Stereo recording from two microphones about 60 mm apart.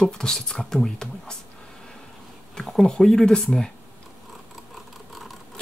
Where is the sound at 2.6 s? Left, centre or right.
Centre.